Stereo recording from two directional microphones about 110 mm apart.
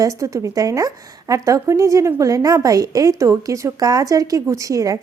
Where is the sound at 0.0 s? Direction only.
30° right (ahead or behind).